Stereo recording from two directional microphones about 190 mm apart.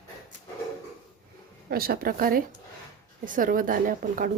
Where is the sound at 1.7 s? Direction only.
50° right (ahead or behind).